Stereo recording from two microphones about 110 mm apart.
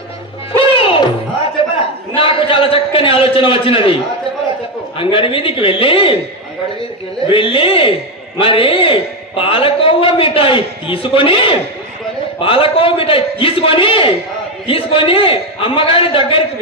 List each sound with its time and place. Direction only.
0.6 s music: 55° left (ahead or behind)
1.6 s a sound: 55° left (ahead or behind)
4.9 s a man's voice: 55° left (ahead or behind)
7.2 s a man's voice: 55° left (ahead or behind)